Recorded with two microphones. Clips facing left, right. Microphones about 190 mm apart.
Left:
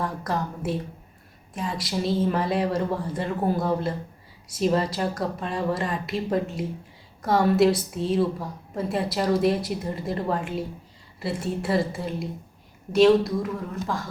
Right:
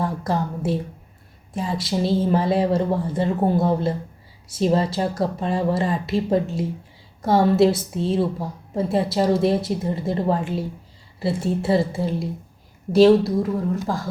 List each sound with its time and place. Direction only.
0.0 s a woman's voice: 30° right (ahead or behind)